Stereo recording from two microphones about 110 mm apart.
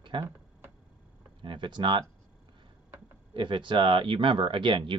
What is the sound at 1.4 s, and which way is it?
Speech, 45° right (ahead or behind).